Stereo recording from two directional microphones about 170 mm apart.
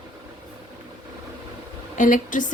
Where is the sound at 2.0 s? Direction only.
50° left (ahead or behind).